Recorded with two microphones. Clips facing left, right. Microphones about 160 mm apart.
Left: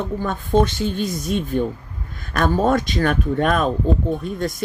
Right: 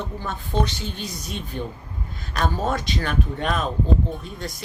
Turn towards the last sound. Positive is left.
turn(degrees=50)  # may be behind; listen again after turning